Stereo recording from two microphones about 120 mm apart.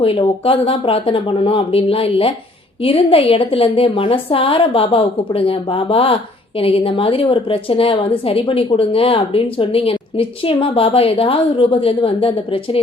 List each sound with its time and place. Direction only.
0.0 s a woman's voice: 50° left (ahead or behind)